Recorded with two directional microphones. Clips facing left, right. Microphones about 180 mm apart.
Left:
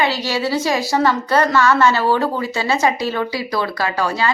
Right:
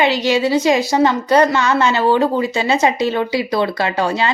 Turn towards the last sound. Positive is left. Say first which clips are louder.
# right 2 dB
turn(degrees=-25)  # may be behind; listen again after turning